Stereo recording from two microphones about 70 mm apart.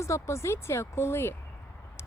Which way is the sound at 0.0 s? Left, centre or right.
Left.